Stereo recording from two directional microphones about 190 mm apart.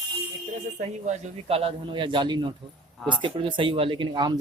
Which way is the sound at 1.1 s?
30° right (ahead or behind).